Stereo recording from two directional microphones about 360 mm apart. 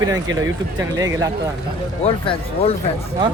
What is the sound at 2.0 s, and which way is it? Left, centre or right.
Speech, centre.